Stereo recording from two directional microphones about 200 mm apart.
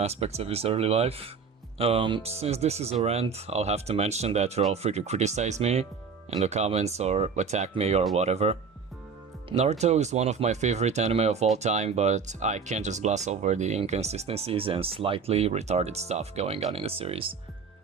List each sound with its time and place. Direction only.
0.0 s speech: 30° right (ahead or behind)